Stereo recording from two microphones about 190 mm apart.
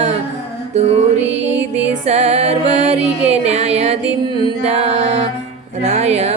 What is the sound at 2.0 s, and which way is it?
Music, 35° right (ahead or behind).